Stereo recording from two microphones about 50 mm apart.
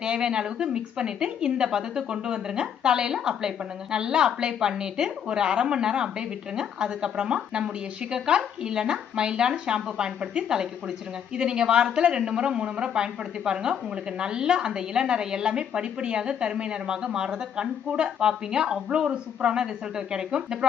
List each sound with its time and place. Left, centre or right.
0.0 s a woman's voice: centre